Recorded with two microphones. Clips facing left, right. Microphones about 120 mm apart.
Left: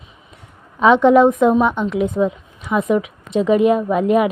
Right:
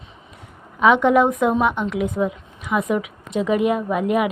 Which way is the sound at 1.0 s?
25° left (ahead or behind).